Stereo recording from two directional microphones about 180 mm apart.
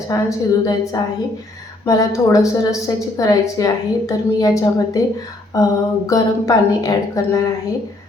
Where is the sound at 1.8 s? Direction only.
20° left (ahead or behind).